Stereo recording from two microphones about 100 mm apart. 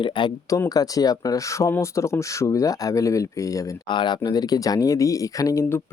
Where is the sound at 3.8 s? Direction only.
50° left (ahead or behind).